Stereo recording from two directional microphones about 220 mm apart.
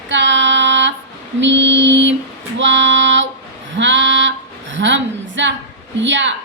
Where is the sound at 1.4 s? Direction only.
55° right (ahead or behind).